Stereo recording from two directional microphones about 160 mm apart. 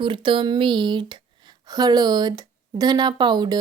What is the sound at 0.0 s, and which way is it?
Speech, 30° right (ahead or behind).